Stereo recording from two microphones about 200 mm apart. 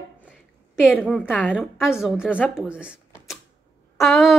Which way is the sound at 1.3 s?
5° left (ahead or behind).